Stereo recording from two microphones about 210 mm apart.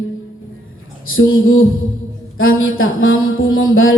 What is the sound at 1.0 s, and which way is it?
Mantra, 75° left (ahead or behind).